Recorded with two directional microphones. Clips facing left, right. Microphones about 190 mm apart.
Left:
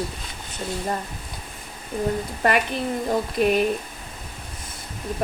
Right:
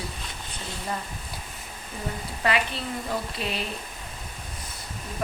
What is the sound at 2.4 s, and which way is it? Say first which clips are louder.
Speech: left 4 dB; 45° left (ahead or behind).